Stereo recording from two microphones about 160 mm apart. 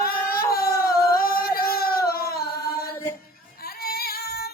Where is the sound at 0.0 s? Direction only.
70° left (ahead or behind).